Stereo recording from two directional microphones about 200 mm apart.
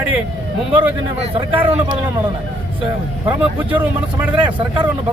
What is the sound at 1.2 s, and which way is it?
Speech, 25° right (ahead or behind).